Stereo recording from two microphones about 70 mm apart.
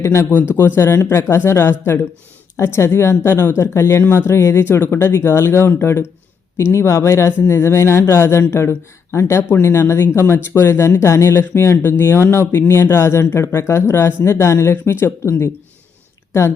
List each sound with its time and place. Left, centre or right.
0.0 s speech: left